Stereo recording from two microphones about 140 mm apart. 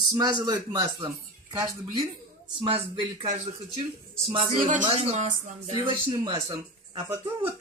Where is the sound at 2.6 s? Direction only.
40° right (ahead or behind).